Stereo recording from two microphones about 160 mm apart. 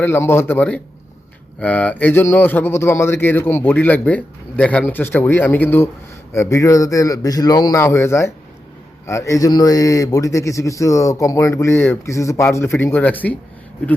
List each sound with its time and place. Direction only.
0.0 s speech: 15° left (ahead or behind)